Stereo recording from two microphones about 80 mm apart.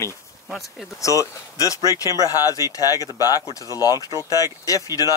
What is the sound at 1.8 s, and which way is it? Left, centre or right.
Speech, right.